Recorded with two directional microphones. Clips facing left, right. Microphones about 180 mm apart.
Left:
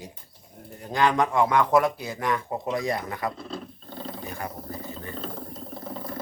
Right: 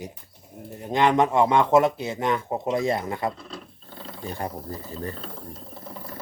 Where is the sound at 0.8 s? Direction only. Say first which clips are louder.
Right 3 dB; 20° right (ahead or behind).